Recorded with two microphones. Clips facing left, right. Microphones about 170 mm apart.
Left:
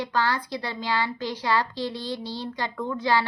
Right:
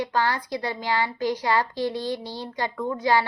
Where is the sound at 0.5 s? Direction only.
45° right (ahead or behind).